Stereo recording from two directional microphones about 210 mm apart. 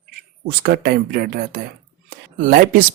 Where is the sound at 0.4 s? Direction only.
45° right (ahead or behind).